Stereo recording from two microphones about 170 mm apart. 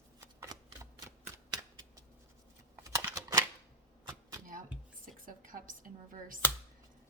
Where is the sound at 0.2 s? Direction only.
15° right (ahead or behind).